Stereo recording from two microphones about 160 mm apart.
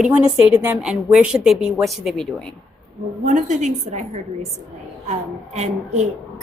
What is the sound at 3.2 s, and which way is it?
Speech, 50° right (ahead or behind).